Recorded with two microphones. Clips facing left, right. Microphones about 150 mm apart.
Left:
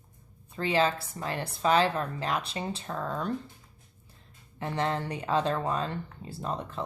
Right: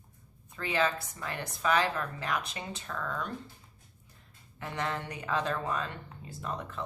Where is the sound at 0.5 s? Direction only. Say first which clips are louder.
Left 4 dB; 30° left (ahead or behind).